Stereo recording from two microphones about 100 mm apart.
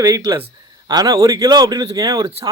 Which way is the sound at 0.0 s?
35° right (ahead or behind).